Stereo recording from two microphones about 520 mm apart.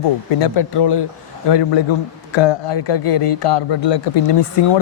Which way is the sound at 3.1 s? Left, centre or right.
Left.